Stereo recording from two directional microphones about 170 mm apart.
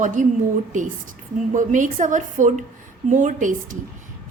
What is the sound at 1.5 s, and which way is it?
A woman's voice, 50° right (ahead or behind).